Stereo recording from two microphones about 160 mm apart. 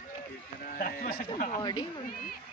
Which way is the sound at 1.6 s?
25° left (ahead or behind).